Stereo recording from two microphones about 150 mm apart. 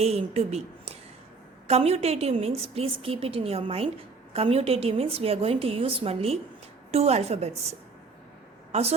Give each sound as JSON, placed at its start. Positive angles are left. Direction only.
{"t": 0.0, "sound": "a woman's voice", "side_deg": -45}